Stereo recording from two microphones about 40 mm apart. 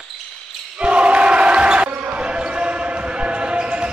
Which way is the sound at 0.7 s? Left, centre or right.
Right.